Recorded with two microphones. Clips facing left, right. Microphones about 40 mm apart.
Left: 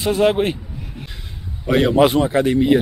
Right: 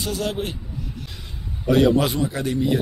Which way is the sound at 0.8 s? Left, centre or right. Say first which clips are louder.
Left 1 dB; left.